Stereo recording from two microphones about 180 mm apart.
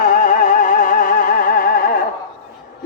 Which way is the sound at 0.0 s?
45° left (ahead or behind).